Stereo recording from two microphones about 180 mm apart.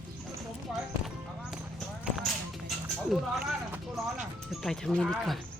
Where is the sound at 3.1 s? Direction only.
Centre (ahead or behind).